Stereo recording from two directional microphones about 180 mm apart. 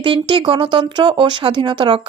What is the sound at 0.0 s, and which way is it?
Speech, 30° right (ahead or behind).